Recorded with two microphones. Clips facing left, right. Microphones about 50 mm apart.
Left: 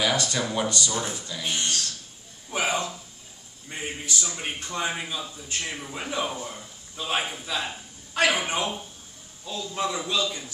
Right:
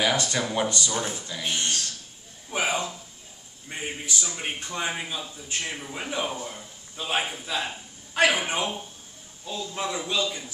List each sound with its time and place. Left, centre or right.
0.0 s a man's voice: right
2.5 s a sound: centre
3.6 s a man's voice: centre
6.3 s speech: centre
7.0 s a man's voice: centre